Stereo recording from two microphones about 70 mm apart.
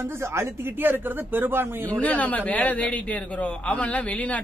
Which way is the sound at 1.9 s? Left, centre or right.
Left.